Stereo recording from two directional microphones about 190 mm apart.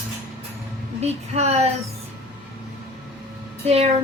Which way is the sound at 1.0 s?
35° right (ahead or behind).